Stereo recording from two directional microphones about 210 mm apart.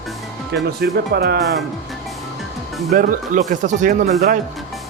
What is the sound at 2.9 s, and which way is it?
Speech, 35° right (ahead or behind).